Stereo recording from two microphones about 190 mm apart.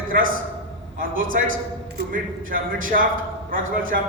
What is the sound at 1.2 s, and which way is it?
Speech, 90° right.